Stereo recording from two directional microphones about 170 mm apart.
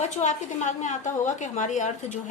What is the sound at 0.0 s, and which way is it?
A woman's voice, 45° left (ahead or behind).